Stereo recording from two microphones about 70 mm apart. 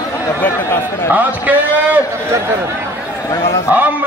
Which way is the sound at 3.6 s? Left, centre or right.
Right.